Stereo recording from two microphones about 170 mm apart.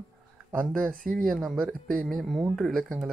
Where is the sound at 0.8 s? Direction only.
55° right (ahead or behind).